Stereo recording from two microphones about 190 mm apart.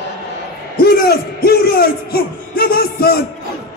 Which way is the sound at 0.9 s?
55° left (ahead or behind).